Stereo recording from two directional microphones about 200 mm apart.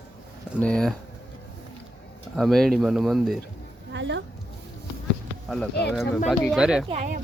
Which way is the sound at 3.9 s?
65° right (ahead or behind).